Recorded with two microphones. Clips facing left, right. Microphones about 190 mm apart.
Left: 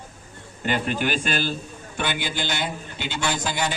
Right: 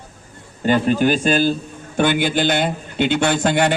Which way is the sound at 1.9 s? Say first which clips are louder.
Right 11 dB; 50° right (ahead or behind).